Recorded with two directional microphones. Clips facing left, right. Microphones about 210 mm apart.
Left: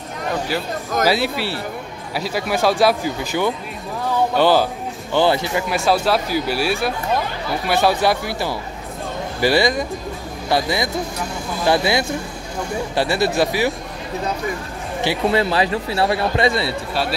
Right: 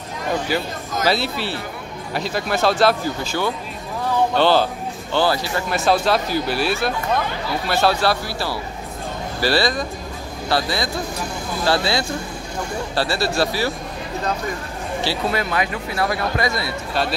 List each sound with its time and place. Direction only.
0.5 s speech: centre (ahead or behind)
1.0 s speech: 10° left (ahead or behind)
5.7 s speech: 5° left (ahead or behind)
15.0 s speech: 30° left (ahead or behind)